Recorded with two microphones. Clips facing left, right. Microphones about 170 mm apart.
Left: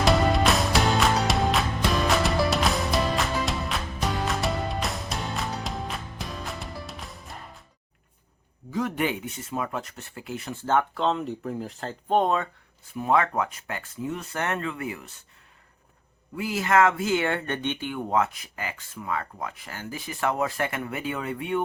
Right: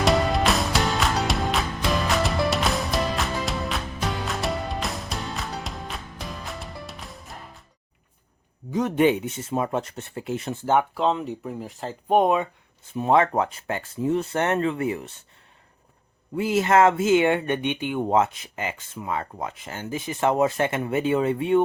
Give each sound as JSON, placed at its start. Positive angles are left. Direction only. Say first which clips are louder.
{"t": 0.0, "sound": "music", "louder": "even", "side_deg": 0}
{"t": 8.7, "sound": "speech", "louder": "right 7 dB", "side_deg": -20}
{"t": 16.3, "sound": "speech", "louder": "right 4 dB", "side_deg": -25}